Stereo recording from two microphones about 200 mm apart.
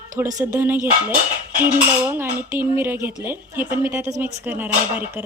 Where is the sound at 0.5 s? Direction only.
10° right (ahead or behind).